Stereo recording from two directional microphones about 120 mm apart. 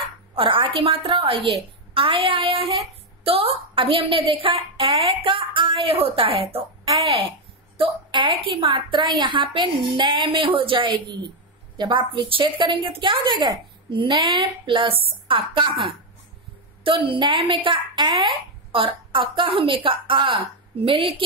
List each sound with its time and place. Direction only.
0.4 s a woman's voice: 45° right (ahead or behind)
16.8 s a woman's voice: 45° right (ahead or behind)